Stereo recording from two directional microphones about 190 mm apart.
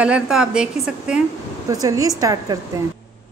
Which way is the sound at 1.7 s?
20° right (ahead or behind).